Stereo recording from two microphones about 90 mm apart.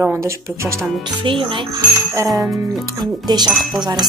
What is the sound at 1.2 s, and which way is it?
Speech, 70° right (ahead or behind).